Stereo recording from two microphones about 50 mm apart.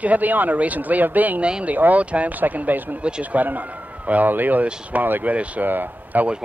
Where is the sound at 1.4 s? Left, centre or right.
Right.